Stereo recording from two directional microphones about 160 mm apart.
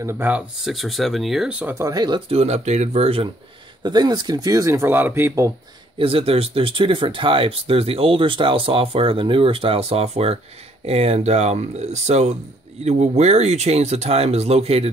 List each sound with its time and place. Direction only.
0.0 s speech: 10° right (ahead or behind)
1.8 s speech: 25° right (ahead or behind)
3.8 s speech: 25° right (ahead or behind)
5.9 s speech: 35° right (ahead or behind)